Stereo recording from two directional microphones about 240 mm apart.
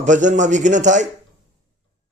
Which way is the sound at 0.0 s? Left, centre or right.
Right.